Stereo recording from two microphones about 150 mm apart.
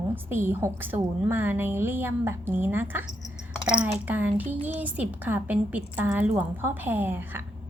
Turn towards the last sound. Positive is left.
turn(degrees=-15)  # may be behind; listen again after turning